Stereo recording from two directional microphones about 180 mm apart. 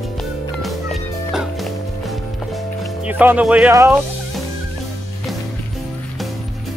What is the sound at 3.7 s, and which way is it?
Speech, 15° right (ahead or behind).